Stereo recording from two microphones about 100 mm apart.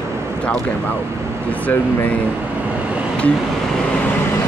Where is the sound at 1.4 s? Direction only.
15° left (ahead or behind).